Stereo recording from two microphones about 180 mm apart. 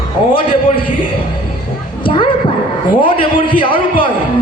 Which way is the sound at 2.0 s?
30° left (ahead or behind).